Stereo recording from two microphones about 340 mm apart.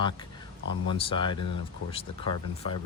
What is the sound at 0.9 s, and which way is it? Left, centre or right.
Speech, centre.